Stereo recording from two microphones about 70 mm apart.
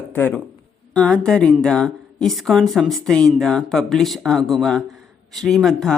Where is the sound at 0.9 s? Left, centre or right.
Centre.